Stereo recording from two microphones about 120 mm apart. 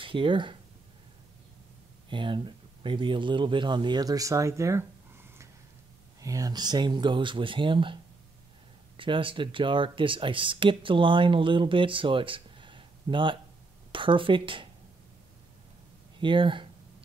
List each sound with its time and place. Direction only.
0.0 s speech: 45° right (ahead or behind)
2.0 s speech: 45° right (ahead or behind)
16.2 s speech: 45° right (ahead or behind)